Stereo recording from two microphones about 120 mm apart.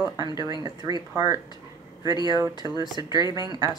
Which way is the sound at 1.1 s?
25° right (ahead or behind).